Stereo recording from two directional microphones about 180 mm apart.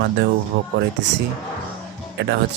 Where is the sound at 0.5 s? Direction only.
55° right (ahead or behind).